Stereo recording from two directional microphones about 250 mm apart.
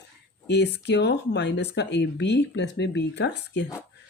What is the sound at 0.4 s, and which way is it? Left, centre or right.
Speech, left.